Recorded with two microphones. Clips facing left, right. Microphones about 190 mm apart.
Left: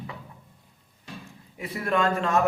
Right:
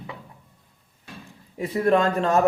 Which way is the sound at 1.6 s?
35° right (ahead or behind).